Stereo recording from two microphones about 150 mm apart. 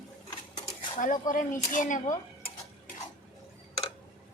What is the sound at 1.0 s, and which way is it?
A woman's voice, 60° left (ahead or behind).